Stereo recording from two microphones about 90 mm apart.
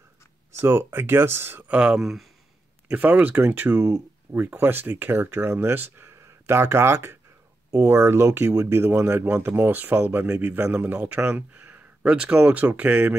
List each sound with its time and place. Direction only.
0.5 s speech: 30° right (ahead or behind); by 2.2 s 5° right (ahead or behind)
2.9 s speech: 20° right (ahead or behind)